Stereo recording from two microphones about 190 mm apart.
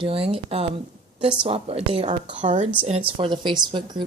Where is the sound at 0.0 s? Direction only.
30° right (ahead or behind).